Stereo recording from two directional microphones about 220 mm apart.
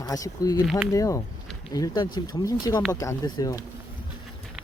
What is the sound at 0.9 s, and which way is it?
Speech, 15° left (ahead or behind).